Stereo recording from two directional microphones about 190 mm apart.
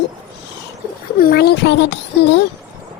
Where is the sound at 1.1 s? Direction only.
50° left (ahead or behind).